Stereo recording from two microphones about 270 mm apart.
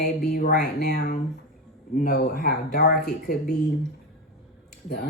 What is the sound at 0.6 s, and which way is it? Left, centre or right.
Speech, left.